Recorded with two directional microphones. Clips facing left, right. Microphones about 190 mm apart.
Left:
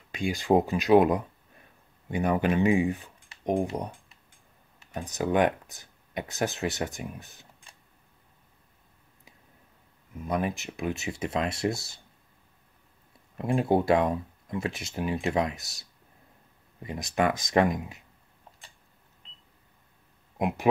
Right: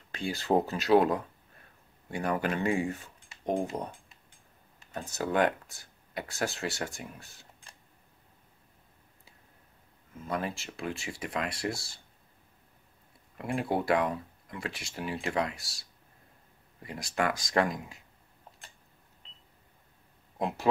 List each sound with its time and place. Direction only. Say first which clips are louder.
0.1 s speech: left 4 dB; 15° left (ahead or behind)
4.9 s speech: left 3 dB; 15° left (ahead or behind)
10.1 s speech: left 5 dB; 15° left (ahead or behind)
13.4 s speech: left 6 dB; 25° left (ahead or behind)
20.3 s speech: left 4 dB; 15° left (ahead or behind)